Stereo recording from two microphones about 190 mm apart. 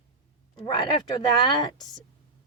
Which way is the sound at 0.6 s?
25° left (ahead or behind).